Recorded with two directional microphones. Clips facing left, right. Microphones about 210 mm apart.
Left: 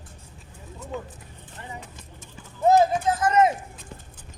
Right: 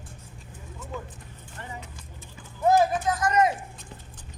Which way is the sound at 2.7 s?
25° left (ahead or behind).